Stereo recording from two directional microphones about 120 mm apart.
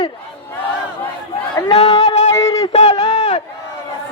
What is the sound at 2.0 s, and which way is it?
Music, 70° left (ahead or behind).